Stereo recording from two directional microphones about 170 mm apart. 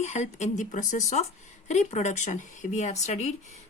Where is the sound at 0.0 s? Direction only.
40° left (ahead or behind).